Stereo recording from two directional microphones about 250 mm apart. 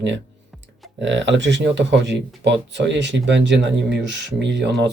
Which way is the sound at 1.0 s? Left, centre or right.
Right.